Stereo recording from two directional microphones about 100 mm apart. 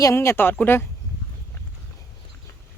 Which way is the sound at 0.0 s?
25° left (ahead or behind).